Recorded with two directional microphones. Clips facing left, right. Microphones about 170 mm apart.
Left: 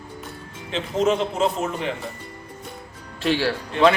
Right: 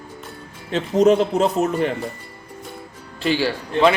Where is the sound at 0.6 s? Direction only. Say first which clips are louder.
Right 6 dB; 45° right (ahead or behind).